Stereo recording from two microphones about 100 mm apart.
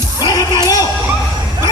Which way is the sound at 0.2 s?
45° left (ahead or behind).